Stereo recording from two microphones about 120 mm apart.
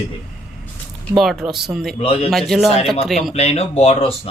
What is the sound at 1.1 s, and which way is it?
Speech, centre (ahead or behind).